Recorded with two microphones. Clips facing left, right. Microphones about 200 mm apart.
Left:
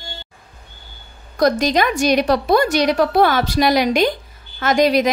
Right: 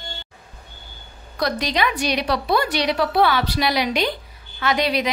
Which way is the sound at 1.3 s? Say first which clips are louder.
Left 7 dB; 45° left (ahead or behind).